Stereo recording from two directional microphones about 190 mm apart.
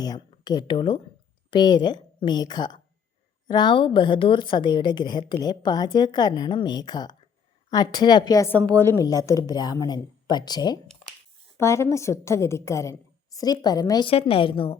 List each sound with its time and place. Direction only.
0.0 s a woman's voice: 20° left (ahead or behind)